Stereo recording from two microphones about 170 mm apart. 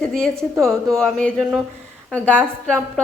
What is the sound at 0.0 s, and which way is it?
A woman's voice, 5° left (ahead or behind).